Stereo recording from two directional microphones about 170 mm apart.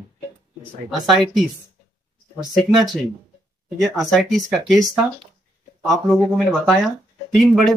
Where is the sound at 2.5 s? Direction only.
Centre (ahead or behind).